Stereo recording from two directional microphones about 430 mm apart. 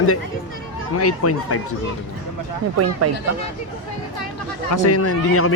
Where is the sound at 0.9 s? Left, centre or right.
Left.